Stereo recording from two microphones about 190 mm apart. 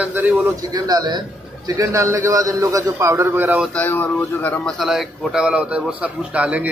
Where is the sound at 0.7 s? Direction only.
20° right (ahead or behind).